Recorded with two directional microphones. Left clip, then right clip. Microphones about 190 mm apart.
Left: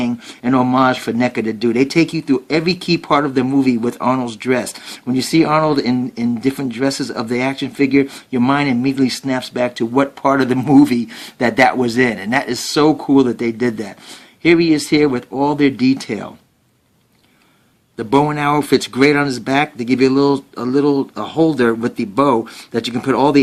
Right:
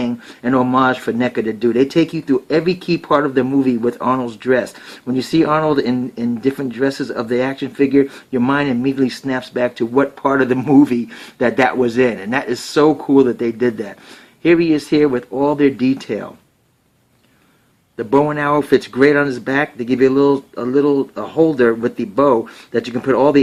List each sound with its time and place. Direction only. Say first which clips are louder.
0.0 s speech: left 1 dB; 35° left (ahead or behind)
17.9 s speech: even; 40° left (ahead or behind)